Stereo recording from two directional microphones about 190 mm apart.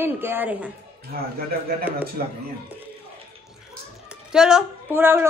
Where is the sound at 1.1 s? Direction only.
50° right (ahead or behind).